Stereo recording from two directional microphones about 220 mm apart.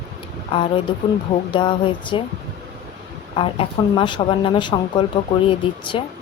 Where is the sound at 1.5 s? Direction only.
20° left (ahead or behind).